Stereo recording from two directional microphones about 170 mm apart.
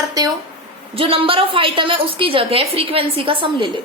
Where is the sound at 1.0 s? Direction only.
30° right (ahead or behind).